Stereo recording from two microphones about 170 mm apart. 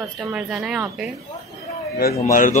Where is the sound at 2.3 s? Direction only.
50° left (ahead or behind).